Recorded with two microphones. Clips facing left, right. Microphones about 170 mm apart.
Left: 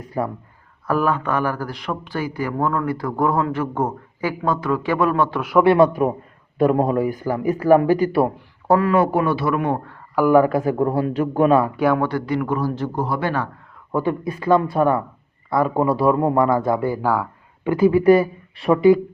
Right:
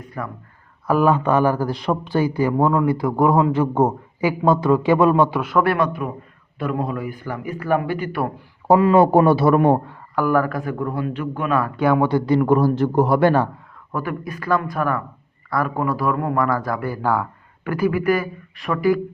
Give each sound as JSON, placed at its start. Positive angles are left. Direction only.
{"t": 0.2, "sound": "a man's voice", "side_deg": 35}
{"t": 0.9, "sound": "a man's voice", "side_deg": -15}
{"t": 5.5, "sound": "a man's voice", "side_deg": 25}
{"t": 8.6, "sound": "speech", "side_deg": -15}
{"t": 10.2, "sound": "a man's voice", "side_deg": 15}
{"t": 10.7, "sound": "a man's voice", "side_deg": 35}
{"t": 11.9, "sound": "a man's voice", "side_deg": -20}
{"t": 12.2, "sound": "speech", "side_deg": -30}
{"t": 12.5, "sound": "a man's voice", "side_deg": -50}
{"t": 13.9, "sound": "a man's voice", "side_deg": 25}